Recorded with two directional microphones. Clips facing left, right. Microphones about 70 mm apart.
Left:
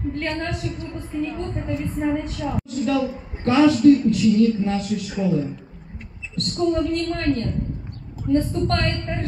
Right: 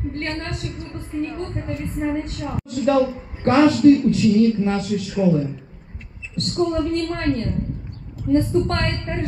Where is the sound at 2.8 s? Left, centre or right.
Right.